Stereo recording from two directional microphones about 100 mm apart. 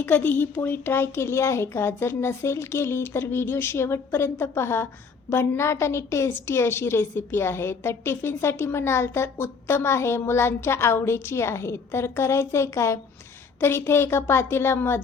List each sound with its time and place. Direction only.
0.0 s a woman's voice: 20° left (ahead or behind)